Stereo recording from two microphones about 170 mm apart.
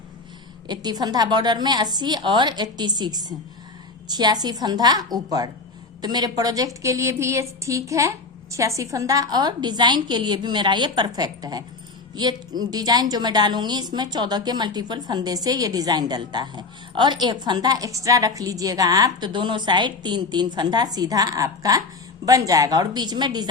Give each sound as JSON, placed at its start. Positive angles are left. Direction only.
{"t": 0.7, "sound": "a woman's voice", "side_deg": -25}